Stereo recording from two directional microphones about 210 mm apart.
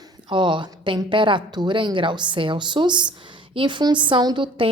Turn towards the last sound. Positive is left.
turn(degrees=-20)  # may be behind; listen again after turning